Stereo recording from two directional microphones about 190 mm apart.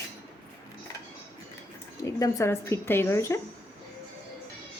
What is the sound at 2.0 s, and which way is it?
Speech, 15° left (ahead or behind).